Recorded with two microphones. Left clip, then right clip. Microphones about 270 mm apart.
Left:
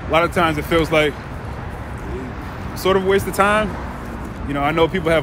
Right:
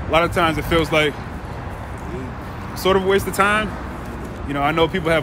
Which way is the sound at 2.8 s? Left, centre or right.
Centre.